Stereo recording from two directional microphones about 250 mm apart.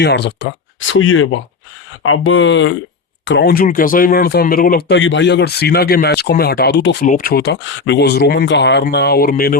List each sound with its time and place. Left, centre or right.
0.0 s speech: left
4.9 s speech: left